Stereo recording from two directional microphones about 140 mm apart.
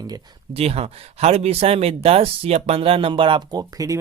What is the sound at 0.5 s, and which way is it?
Speech, 45° right (ahead or behind).